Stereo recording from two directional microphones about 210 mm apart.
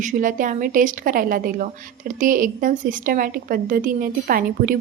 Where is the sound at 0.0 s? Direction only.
40° right (ahead or behind).